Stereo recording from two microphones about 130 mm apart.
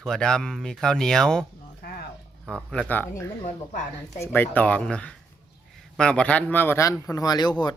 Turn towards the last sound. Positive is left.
turn(degrees=30)  # may be behind; listen again after turning